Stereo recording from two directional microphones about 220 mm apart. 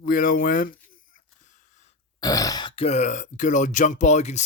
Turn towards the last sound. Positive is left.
turn(degrees=30)  # may be behind; listen again after turning